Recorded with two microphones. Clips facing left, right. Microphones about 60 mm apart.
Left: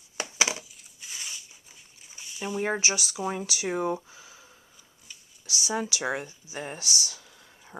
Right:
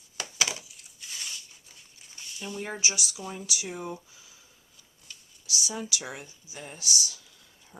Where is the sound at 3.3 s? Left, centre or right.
Left.